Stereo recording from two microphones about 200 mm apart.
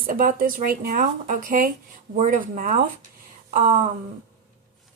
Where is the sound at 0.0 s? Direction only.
45° right (ahead or behind).